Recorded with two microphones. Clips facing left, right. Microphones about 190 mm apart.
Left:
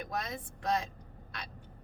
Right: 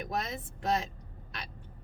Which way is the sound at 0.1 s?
25° right (ahead or behind).